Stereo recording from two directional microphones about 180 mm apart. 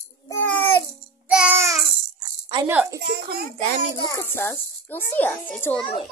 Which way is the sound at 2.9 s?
60° right (ahead or behind).